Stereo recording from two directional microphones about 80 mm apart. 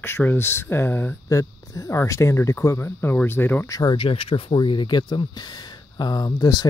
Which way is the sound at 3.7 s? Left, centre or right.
Left.